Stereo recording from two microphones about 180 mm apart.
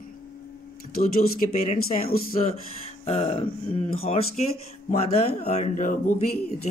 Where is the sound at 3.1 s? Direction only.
30° left (ahead or behind).